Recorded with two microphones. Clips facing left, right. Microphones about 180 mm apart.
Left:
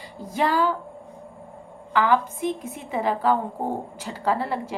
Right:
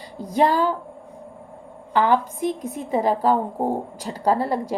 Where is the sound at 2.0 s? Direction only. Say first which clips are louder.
Right 2 dB; 40° right (ahead or behind).